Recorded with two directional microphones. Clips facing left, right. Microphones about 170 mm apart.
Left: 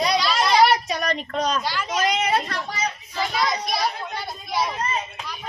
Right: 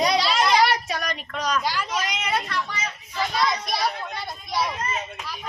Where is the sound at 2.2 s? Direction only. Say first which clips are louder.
Left 3 dB; 35° left (ahead or behind).